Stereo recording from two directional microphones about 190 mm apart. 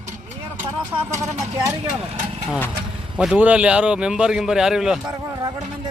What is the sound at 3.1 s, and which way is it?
Speech, 5° right (ahead or behind).